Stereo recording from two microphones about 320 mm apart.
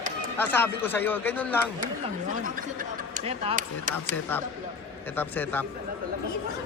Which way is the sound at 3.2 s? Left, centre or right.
Right.